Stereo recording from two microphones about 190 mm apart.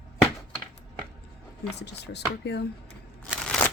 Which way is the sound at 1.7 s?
65° left (ahead or behind).